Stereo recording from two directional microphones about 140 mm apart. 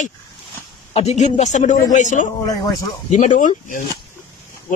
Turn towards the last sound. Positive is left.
turn(degrees=65)  # may be behind; listen again after turning